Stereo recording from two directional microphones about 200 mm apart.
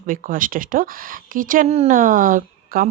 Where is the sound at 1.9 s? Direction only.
45° right (ahead or behind).